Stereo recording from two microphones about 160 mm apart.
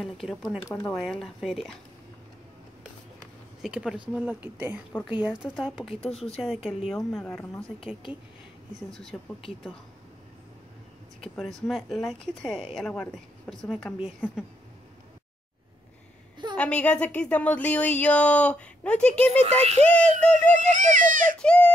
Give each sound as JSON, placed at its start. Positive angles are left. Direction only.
{"t": 0.0, "sound": "a woman's voice", "side_deg": 0}
{"t": 3.6, "sound": "a woman's voice", "side_deg": -5}
{"t": 9.1, "sound": "a woman's voice", "side_deg": 5}
{"t": 11.3, "sound": "a woman's voice", "side_deg": 0}
{"t": 16.5, "sound": "a woman's voice", "side_deg": 10}
{"t": 20.5, "sound": "a child's voice", "side_deg": -50}
{"t": 21.4, "sound": "a woman's voice", "side_deg": 10}